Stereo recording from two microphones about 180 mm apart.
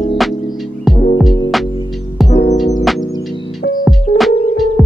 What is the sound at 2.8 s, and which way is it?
Music, centre (ahead or behind).